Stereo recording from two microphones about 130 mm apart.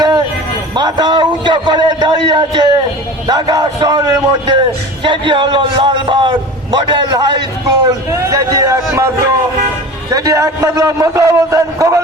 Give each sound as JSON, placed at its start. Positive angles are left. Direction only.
{"t": 0.8, "sound": "a man's voice", "side_deg": -35}